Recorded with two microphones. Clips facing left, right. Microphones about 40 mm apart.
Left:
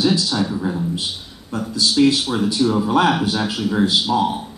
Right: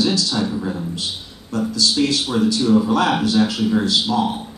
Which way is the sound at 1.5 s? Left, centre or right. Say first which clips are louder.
Right 1 dB; centre.